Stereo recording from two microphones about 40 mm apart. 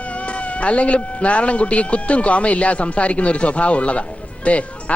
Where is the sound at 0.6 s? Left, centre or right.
Left.